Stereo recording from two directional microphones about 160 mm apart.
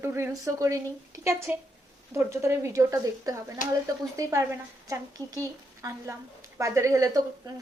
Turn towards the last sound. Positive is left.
turn(degrees=-20)  # may be behind; listen again after turning